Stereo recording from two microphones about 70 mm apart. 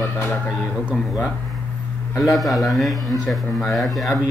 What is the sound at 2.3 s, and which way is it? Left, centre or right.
Speech, centre.